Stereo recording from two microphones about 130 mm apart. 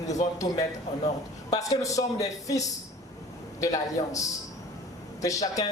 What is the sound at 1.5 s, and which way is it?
Speech, 25° left (ahead or behind).